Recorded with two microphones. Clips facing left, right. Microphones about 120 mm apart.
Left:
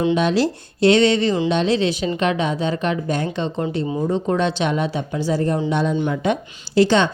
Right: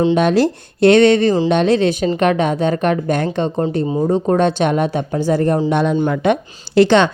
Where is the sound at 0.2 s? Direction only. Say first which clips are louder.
Right 4 dB; 55° right (ahead or behind).